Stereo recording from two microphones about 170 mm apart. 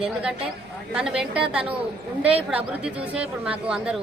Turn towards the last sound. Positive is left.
turn(degrees=-5)  # may be behind; listen again after turning